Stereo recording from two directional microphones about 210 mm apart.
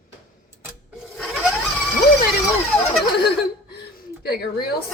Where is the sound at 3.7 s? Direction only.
50° left (ahead or behind).